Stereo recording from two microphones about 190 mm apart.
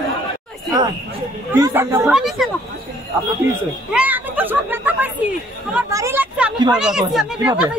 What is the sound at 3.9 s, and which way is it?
Chatter, 10° right (ahead or behind).